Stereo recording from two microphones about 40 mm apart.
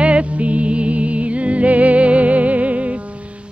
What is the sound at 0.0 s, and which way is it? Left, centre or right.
Music, right.